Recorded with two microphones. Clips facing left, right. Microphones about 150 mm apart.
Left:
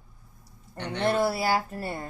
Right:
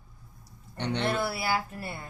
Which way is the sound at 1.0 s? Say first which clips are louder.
Left 7 dB; 40° left (ahead or behind).